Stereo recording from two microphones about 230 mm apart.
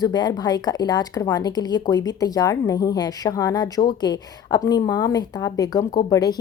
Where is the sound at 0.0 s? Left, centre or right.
Centre.